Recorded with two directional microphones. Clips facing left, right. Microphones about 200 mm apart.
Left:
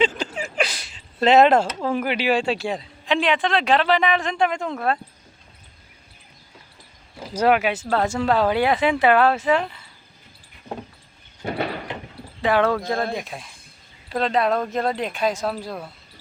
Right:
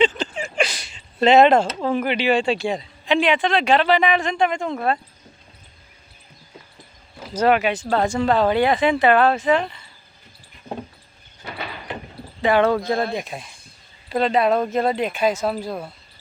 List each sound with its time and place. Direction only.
0.3 s a sound: 5° left (ahead or behind)
1.8 s speech: 5° left (ahead or behind)
7.3 s speech: 5° left (ahead or behind)
11.4 s door: 50° left (ahead or behind)
12.4 s speech: centre (ahead or behind)